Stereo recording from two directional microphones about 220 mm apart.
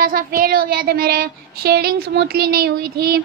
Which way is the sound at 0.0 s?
40° right (ahead or behind).